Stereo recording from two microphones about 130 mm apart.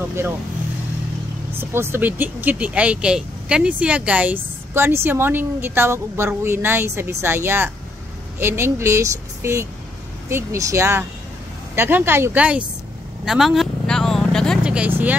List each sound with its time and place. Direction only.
1.6 s a woman's voice: 15° right (ahead or behind)
13.2 s vehicle: 5° right (ahead or behind)
14.6 s vehicle: 10° right (ahead or behind)